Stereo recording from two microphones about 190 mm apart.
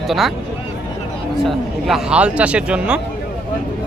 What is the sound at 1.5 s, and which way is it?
Speech, 5° right (ahead or behind).